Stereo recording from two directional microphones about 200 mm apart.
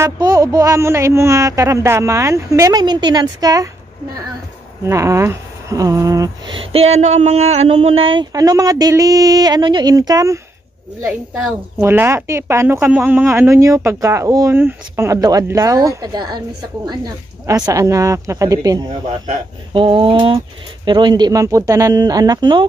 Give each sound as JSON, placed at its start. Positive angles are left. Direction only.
{"t": 0.0, "sound": "speech", "side_deg": -15}
{"t": 4.8, "sound": "speech", "side_deg": -15}
{"t": 11.8, "sound": "speech", "side_deg": -10}